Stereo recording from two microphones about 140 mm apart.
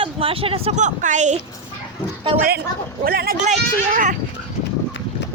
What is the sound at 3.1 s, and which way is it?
Speech, 90° right.